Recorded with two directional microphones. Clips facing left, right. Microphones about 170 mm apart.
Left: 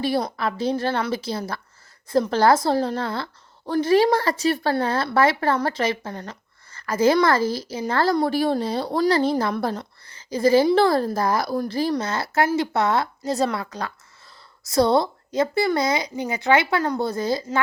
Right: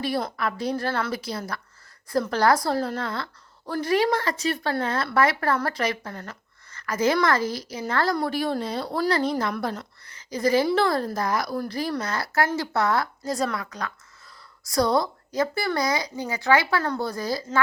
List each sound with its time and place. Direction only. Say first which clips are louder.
0.3 s a woman's voice: left 3 dB; 25° left (ahead or behind)